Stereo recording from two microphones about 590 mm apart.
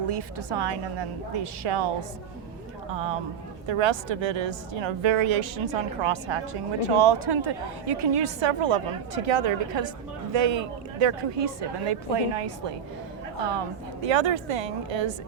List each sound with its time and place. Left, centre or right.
0.1 s a woman's voice: right